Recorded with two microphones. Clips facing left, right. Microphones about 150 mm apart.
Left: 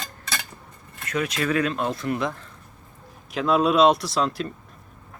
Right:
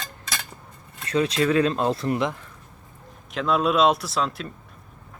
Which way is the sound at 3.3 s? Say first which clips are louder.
Left 2 dB; centre (ahead or behind).